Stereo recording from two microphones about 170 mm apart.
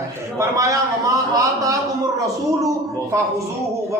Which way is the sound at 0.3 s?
20° right (ahead or behind).